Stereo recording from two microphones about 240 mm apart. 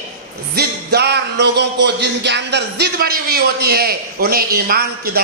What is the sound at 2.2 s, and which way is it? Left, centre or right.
A man's voice, right.